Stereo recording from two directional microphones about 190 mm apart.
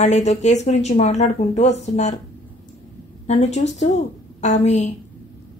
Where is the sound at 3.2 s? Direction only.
35° left (ahead or behind).